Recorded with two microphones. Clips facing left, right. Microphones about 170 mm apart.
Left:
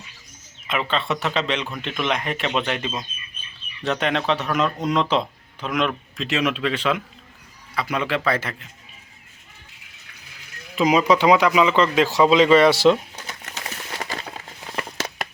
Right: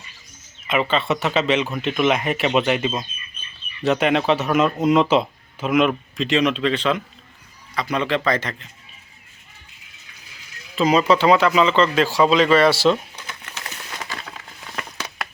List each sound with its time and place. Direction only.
0.7 s speech: 5° right (ahead or behind)
6.1 s speech: 5° left (ahead or behind)
10.8 s speech: 15° left (ahead or behind)
13.2 s a sound: 40° left (ahead or behind)